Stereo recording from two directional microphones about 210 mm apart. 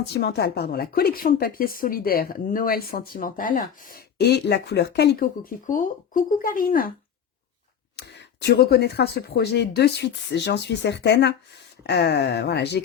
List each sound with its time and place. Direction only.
0.0 s a woman's voice: 50° left (ahead or behind)
7.9 s a woman's voice: 55° left (ahead or behind)